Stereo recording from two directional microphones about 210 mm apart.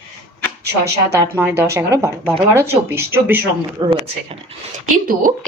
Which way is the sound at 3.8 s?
25° right (ahead or behind).